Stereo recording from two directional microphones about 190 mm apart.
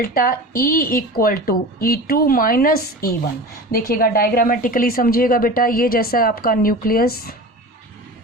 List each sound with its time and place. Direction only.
0.0 s a woman's voice: 50° left (ahead or behind)